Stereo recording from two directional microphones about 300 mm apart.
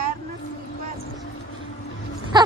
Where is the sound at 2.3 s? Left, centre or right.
Centre.